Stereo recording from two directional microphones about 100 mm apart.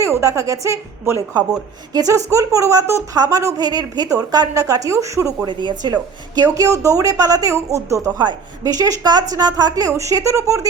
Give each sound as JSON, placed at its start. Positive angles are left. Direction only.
{"t": 0.0, "sound": "a woman's voice", "side_deg": -30}
{"t": 1.9, "sound": "a woman's voice", "side_deg": -35}
{"t": 5.5, "sound": "a woman's voice", "side_deg": -50}